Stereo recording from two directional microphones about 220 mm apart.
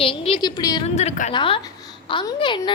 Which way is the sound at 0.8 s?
30° left (ahead or behind).